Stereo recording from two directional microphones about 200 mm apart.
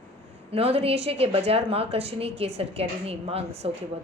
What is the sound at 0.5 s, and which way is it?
A woman's voice, 30° right (ahead or behind).